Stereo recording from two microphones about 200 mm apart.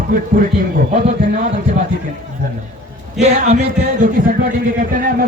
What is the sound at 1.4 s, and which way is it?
Speech, 40° right (ahead or behind).